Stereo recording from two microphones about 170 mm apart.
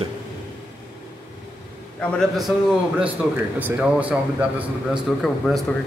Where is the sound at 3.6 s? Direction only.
10° right (ahead or behind).